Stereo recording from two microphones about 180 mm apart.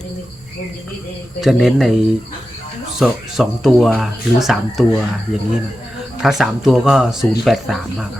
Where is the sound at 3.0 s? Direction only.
Centre (ahead or behind).